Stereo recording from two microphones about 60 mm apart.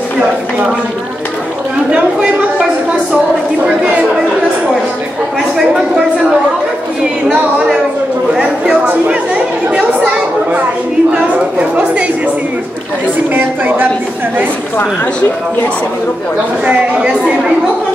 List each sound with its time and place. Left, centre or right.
3.8 s a woman's voice: right
8.4 s a woman's voice: centre
13.3 s a woman's voice: right
16.6 s a woman's voice: centre